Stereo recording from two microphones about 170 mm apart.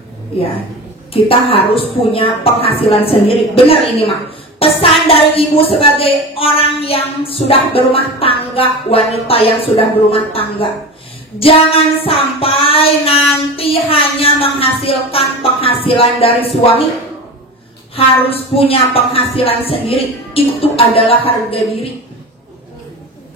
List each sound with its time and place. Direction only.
1.1 s speech: 35° left (ahead or behind)
3.9 s a sound: 35° left (ahead or behind)
5.0 s speech: 35° left (ahead or behind)
17.9 s speech: 35° left (ahead or behind)